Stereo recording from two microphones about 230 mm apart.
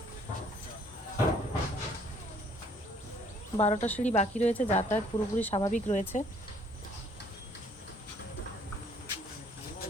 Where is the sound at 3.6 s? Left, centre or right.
Left.